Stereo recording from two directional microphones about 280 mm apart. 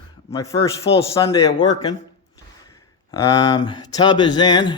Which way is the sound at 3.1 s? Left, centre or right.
Centre.